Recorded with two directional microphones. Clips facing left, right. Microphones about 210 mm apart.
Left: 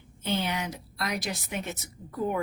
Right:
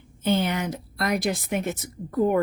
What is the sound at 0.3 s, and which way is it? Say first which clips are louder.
A woman's voice: right 6 dB; 55° right (ahead or behind).